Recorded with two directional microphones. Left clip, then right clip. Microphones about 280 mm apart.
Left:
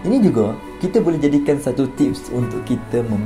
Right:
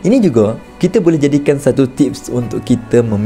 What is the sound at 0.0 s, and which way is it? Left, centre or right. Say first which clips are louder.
Speech: right 6 dB; right.